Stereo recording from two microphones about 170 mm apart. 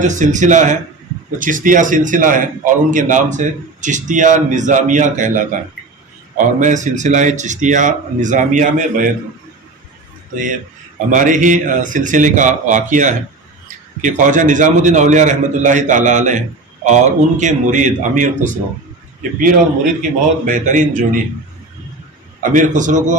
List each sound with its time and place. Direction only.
0.0 s speech: 45° right (ahead or behind)
11.1 s speech: 50° right (ahead or behind)
20.0 s speech: 50° right (ahead or behind)
22.5 s speech: 50° right (ahead or behind)